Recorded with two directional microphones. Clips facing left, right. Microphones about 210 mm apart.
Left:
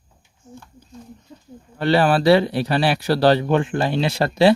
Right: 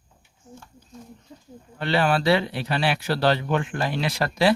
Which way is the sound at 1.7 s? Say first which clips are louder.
Left 5 dB; 40° left (ahead or behind).